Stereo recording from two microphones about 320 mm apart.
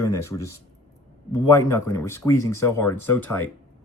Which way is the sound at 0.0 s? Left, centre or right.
Centre.